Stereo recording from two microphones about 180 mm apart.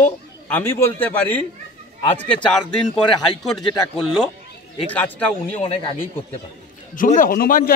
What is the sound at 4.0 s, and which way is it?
Speech, centre (ahead or behind).